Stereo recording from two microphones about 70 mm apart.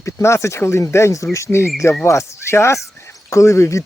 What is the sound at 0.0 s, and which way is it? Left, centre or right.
Speech, left.